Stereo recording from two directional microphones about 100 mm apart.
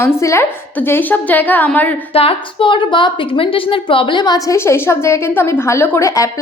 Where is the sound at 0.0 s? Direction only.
25° left (ahead or behind).